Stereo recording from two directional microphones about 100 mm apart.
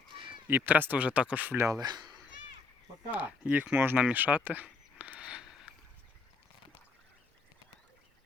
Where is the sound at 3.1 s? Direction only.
15° right (ahead or behind).